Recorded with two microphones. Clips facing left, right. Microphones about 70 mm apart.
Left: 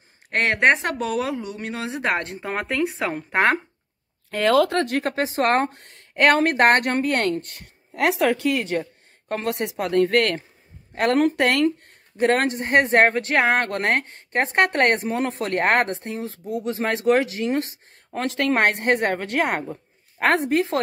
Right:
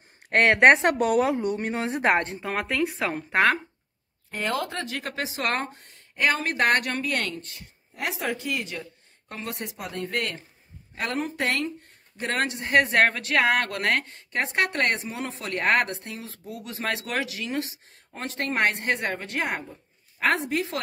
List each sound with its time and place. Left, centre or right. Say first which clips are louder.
0.3 s a woman's voice: right 2 dB; right
1.2 s speech: right 3 dB; right
1.6 s speech: right 1 dB; right
2.4 s speech: left 2 dB; centre
4.3 s speech: left 10 dB; left
4.7 s a woman's voice: left 9 dB; left
5.7 s speech: left 1 dB; left
6.5 s a woman's voice: left 6 dB; left
12.2 s speech: left 8 dB; left
18.1 s a woman's voice: left 7 dB; left